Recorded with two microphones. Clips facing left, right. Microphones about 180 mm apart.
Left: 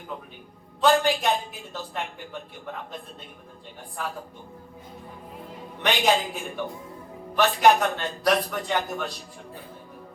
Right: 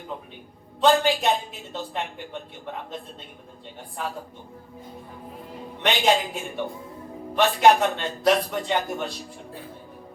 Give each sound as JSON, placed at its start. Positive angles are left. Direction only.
{"t": 0.8, "sound": "a man's voice", "side_deg": -25}
{"t": 5.8, "sound": "a man's voice", "side_deg": -25}